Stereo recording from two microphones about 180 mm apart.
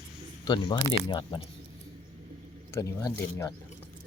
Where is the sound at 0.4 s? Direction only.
25° left (ahead or behind).